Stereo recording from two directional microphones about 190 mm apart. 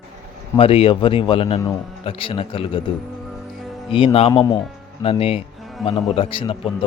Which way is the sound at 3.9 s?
30° left (ahead or behind).